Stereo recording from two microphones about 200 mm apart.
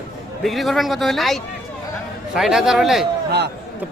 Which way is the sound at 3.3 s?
55° right (ahead or behind).